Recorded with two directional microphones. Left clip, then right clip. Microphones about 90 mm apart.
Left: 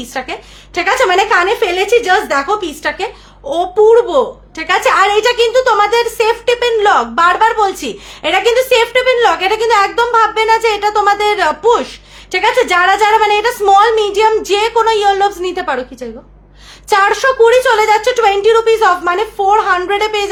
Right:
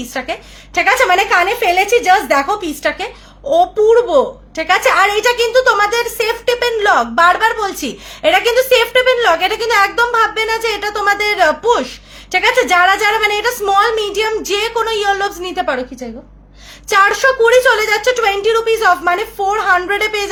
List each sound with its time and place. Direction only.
0.0 s a woman's voice: 30° left (ahead or behind)
16.9 s a woman's voice: 35° left (ahead or behind)